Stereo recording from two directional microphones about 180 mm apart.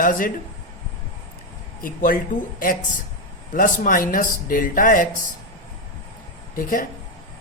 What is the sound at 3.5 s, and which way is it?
Speech, 50° left (ahead or behind).